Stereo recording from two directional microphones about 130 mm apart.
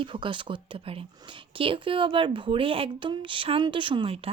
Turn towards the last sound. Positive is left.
turn(degrees=-50)  # may be behind; listen again after turning